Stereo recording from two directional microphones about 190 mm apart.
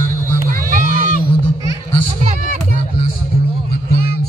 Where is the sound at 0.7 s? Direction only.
45° right (ahead or behind).